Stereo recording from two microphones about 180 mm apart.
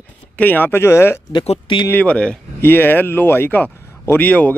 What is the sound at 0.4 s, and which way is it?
Speech, 10° left (ahead or behind).